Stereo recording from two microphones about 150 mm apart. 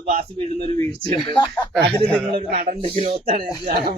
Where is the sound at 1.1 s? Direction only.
30° left (ahead or behind).